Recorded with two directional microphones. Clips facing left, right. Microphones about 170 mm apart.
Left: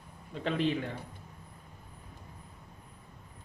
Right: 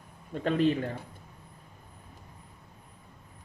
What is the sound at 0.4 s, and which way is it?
Speech, 45° right (ahead or behind).